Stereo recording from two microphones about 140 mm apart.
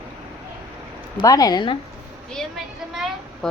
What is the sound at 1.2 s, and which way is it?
Speech, 25° left (ahead or behind).